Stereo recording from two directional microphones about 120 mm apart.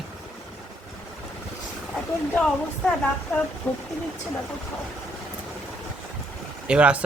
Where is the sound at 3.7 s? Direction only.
15° left (ahead or behind).